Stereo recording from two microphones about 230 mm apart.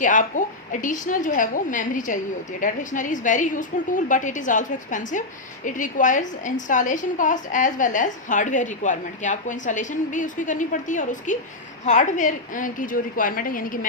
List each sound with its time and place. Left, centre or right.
0.0 s a woman's voice: left